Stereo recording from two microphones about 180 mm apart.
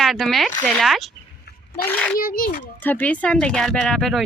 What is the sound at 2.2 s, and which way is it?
Speech, 55° left (ahead or behind).